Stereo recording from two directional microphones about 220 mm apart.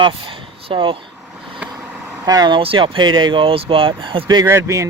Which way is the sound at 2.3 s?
20° right (ahead or behind).